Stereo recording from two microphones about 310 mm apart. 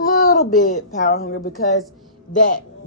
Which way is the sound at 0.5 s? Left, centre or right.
Left.